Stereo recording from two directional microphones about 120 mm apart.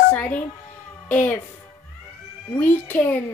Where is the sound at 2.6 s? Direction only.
15° left (ahead or behind).